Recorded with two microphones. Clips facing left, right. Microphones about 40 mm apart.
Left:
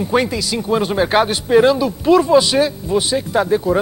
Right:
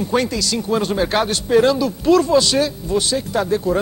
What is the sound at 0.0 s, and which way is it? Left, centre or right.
Speech, centre.